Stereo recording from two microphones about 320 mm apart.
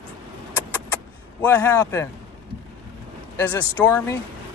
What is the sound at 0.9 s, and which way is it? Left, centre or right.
Vehicle, centre.